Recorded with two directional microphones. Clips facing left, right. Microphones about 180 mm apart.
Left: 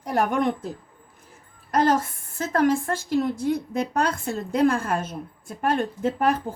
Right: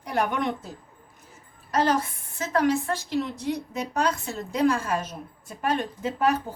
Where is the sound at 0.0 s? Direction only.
45° left (ahead or behind).